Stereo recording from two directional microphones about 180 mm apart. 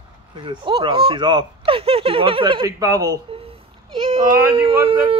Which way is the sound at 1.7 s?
30° right (ahead or behind).